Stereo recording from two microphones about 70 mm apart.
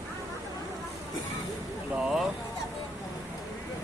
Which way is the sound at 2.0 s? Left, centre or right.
Centre.